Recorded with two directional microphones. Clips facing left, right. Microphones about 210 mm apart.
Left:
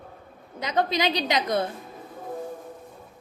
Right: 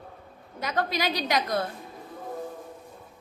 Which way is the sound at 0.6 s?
20° left (ahead or behind).